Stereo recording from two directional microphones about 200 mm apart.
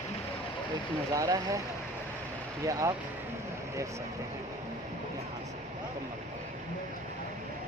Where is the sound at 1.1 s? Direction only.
15° right (ahead or behind).